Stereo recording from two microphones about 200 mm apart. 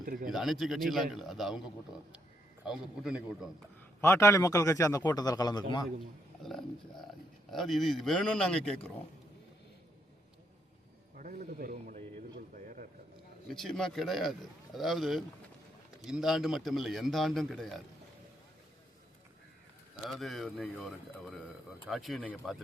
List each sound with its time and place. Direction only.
0.0 s speech: 45° right (ahead or behind)
0.3 s a man's voice: centre (ahead or behind)
4.0 s a man's voice: 15° left (ahead or behind)
6.4 s a man's voice: centre (ahead or behind)
11.2 s a sound: 45° right (ahead or behind)
13.5 s a man's voice: centre (ahead or behind)
20.1 s a man's voice: centre (ahead or behind)